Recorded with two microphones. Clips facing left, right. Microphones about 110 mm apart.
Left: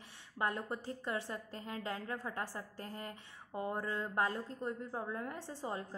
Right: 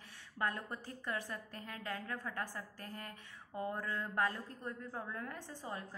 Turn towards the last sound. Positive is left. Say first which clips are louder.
# left 4 dB
turn(degrees=25)  # may be behind; listen again after turning